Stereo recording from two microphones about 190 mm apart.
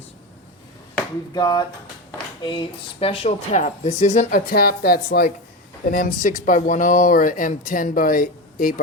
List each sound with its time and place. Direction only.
1.3 s speech: 20° left (ahead or behind); by 4.3 s 35° left (ahead or behind)
4.3 s speech: 50° left (ahead or behind)